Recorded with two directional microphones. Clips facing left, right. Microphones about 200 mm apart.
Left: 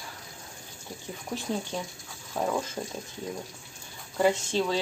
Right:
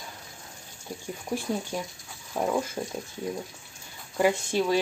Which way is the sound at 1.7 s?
10° right (ahead or behind).